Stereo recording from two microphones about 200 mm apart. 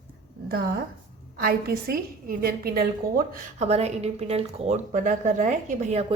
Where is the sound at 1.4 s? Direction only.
50° right (ahead or behind).